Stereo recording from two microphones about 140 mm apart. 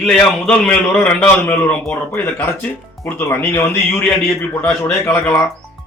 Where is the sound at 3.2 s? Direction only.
20° left (ahead or behind).